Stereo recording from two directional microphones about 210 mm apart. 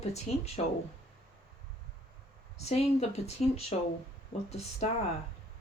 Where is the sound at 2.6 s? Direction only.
30° left (ahead or behind).